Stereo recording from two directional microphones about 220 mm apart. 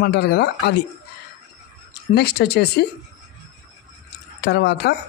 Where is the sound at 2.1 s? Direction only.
45° left (ahead or behind).